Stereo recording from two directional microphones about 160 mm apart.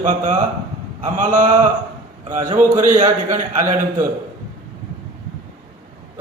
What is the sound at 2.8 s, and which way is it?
Speech, 55° right (ahead or behind).